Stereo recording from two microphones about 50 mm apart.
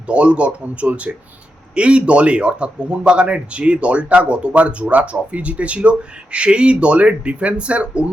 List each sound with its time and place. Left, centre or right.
0.1 s a man's voice: right